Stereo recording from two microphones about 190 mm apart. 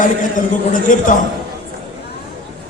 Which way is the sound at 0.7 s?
45° left (ahead or behind).